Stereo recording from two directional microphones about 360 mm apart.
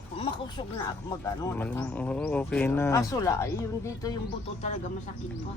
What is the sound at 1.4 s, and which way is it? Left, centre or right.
Speech, centre.